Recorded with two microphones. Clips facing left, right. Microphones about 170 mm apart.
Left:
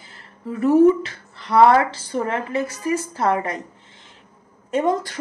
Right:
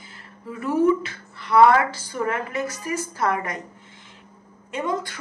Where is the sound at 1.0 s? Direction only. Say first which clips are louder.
Left 2 dB; 35° left (ahead or behind).